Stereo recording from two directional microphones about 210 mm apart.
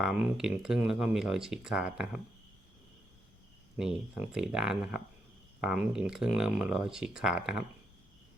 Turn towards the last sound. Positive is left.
turn(degrees=-5)  # may be behind; listen again after turning